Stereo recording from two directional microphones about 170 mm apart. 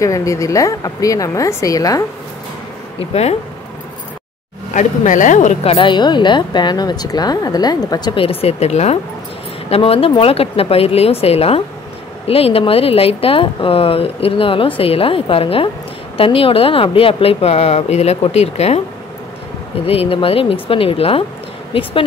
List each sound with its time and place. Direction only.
0.0 s speech: 20° left (ahead or behind)
4.7 s speech: 45° left (ahead or behind)
19.9 s speech: 35° left (ahead or behind)